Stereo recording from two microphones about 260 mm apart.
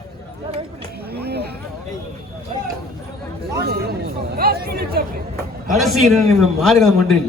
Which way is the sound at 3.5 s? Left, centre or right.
Right.